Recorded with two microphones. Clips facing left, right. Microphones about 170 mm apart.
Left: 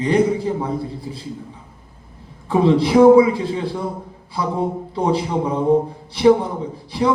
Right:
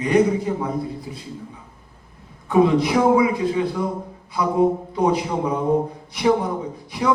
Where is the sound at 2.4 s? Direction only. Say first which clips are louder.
Left 1 dB; 30° left (ahead or behind).